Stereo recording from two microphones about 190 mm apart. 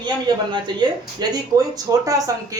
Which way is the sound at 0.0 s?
25° right (ahead or behind).